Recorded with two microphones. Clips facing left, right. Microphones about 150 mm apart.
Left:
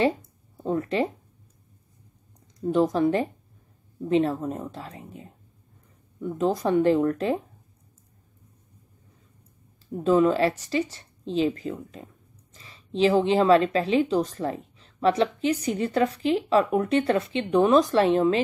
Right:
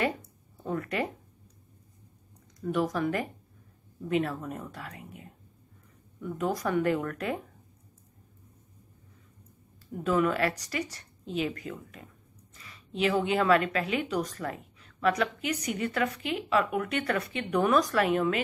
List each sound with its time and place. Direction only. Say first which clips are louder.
0.7 s a woman's voice: left 6 dB; 25° left (ahead or behind)
2.6 s a woman's voice: left 7 dB; 30° left (ahead or behind)
9.9 s a woman's voice: left 6 dB; 25° left (ahead or behind)